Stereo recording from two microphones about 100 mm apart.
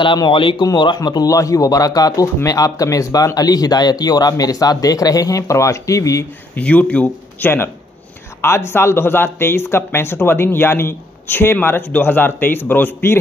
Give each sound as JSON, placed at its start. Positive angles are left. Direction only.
{"t": 0.0, "sound": "speech", "side_deg": 55}
{"t": 6.5, "sound": "speech", "side_deg": 15}